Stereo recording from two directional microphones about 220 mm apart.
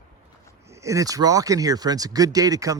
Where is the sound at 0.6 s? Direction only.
15° right (ahead or behind).